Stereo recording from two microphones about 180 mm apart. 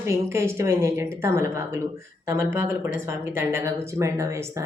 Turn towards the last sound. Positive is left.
turn(degrees=-15)  # may be behind; listen again after turning